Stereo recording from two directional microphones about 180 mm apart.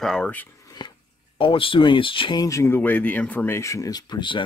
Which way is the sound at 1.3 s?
30° left (ahead or behind).